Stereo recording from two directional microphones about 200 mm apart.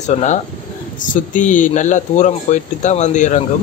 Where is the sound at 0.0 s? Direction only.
35° left (ahead or behind).